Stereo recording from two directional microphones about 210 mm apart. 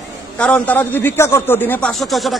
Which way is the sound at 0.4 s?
5° left (ahead or behind).